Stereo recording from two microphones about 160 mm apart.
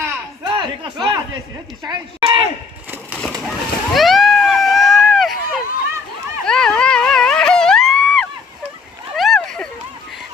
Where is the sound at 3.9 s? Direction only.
Centre (ahead or behind).